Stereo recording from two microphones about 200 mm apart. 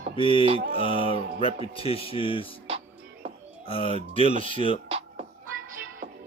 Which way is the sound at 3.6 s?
25° left (ahead or behind).